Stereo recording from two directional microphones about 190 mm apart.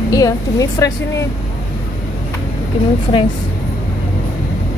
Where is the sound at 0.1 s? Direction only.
20° left (ahead or behind).